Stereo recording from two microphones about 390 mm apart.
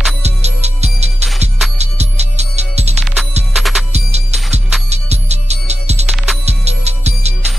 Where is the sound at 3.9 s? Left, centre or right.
Centre.